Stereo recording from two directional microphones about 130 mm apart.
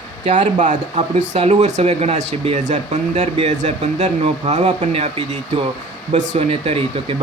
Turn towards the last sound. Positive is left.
turn(degrees=-45)  # may be behind; listen again after turning